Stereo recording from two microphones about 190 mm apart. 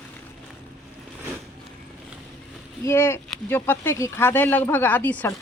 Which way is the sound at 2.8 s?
15° left (ahead or behind).